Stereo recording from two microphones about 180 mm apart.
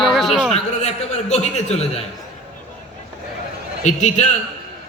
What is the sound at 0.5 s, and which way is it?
A man's voice, 40° left (ahead or behind).